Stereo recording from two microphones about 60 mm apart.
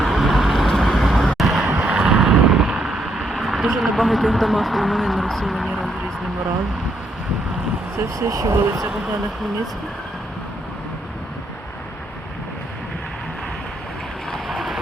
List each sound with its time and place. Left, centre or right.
0.0 s vehicle: centre
1.7 s vehicle: centre
7.9 s speech: right
14.4 s vehicle: centre